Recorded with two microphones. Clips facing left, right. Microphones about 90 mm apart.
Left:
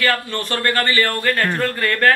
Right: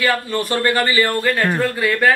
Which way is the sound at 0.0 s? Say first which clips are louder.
Right 2 dB; 10° right (ahead or behind).